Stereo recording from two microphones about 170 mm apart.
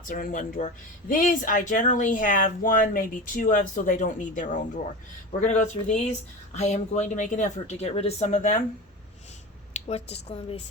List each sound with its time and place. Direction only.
0.1 s speech: 50° left (ahead or behind)
9.9 s speech: 35° left (ahead or behind)